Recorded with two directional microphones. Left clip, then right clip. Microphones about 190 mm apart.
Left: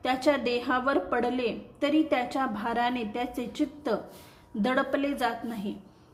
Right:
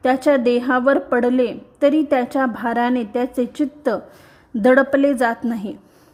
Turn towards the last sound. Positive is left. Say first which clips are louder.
# right 10 dB
turn(degrees=-50)  # may be behind; listen again after turning